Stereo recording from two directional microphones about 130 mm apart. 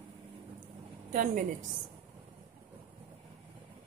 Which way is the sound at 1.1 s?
85° right.